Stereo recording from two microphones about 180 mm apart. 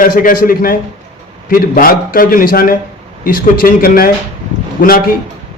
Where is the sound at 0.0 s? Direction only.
50° left (ahead or behind).